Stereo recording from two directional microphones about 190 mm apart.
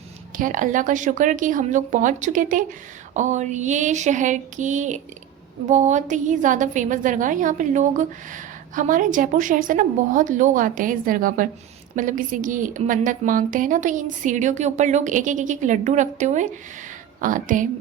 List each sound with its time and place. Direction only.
0.3 s a woman's voice: 45° right (ahead or behind)